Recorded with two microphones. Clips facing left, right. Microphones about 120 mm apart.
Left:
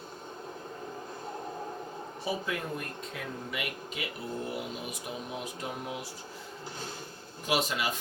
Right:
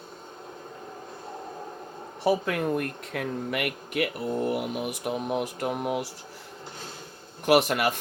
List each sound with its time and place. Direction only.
2.2 s speech: 60° right (ahead or behind)
7.4 s speech: 65° right (ahead or behind)